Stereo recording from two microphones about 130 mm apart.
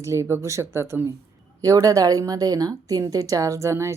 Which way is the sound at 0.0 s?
20° right (ahead or behind).